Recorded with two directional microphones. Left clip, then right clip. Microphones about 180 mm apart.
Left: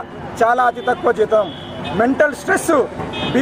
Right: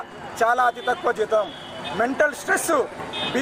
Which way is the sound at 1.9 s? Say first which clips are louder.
Left 6 dB; 15° left (ahead or behind).